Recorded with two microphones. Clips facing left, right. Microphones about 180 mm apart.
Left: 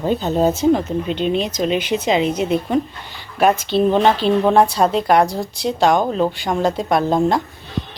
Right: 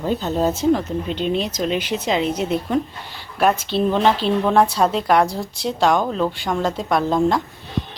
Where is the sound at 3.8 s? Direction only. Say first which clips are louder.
Left 2 dB; 25° left (ahead or behind).